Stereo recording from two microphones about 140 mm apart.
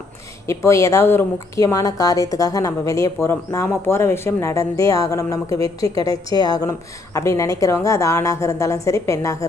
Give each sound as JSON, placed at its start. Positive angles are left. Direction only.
{"t": 0.4, "sound": "a woman's voice", "side_deg": 20}